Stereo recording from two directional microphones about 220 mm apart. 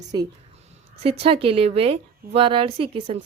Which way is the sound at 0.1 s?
20° right (ahead or behind).